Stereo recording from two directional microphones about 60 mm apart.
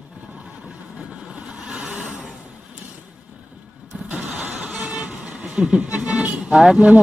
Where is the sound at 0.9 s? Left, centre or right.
Centre.